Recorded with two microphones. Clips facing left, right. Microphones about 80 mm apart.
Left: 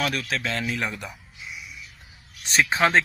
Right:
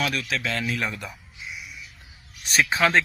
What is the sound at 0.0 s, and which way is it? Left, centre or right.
Speech, left.